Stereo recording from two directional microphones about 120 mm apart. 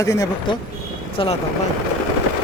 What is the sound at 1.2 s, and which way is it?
Speech, 45° left (ahead or behind).